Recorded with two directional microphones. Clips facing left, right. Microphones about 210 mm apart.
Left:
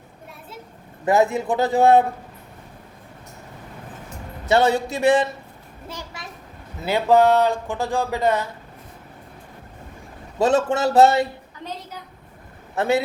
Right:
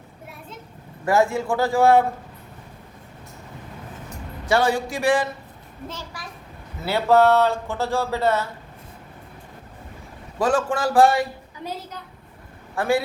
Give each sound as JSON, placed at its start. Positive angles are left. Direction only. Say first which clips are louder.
{"t": 1.0, "sound": "a man's voice", "louder": "left 1 dB", "side_deg": 20}
{"t": 4.4, "sound": "a man's voice", "louder": "left 2 dB", "side_deg": 25}
{"t": 10.3, "sound": "a man's voice", "louder": "left 3 dB", "side_deg": 25}
{"t": 12.7, "sound": "a man's voice", "louder": "left 1 dB", "side_deg": 20}